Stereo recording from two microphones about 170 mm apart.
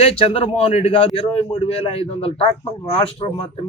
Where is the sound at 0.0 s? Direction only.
35° left (ahead or behind).